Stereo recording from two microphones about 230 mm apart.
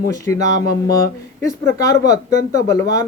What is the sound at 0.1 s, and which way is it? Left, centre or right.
Speech, centre.